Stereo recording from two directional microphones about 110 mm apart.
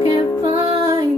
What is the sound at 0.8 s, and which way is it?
Female singing, 35° right (ahead or behind).